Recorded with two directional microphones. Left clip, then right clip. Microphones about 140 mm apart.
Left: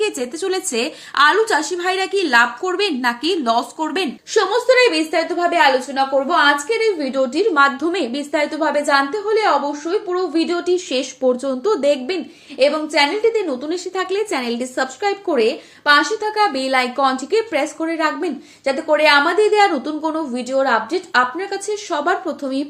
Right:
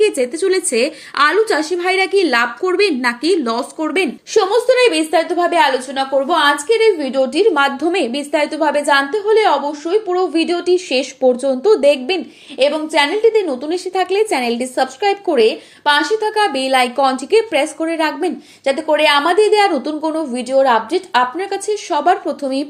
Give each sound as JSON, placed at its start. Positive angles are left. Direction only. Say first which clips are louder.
{"t": 0.0, "sound": "a woman's voice", "louder": "right 6 dB", "side_deg": -15}
{"t": 4.4, "sound": "a woman's voice", "louder": "right 2 dB", "side_deg": -25}